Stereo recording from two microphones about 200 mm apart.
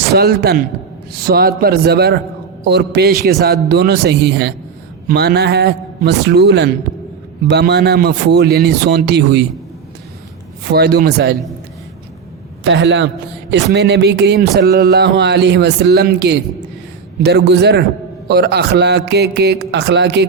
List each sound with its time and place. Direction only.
0.1 s a man's voice: 55° right (ahead or behind)
10.7 s a man's voice: 55° right (ahead or behind)
12.6 s speech: 65° right (ahead or behind)